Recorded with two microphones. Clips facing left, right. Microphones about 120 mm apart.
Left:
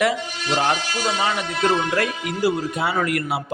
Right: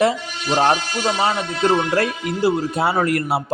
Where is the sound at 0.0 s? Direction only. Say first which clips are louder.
Right 3 dB; 30° right (ahead or behind).